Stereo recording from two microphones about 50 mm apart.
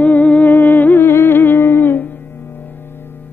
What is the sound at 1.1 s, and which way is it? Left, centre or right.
Humming, left.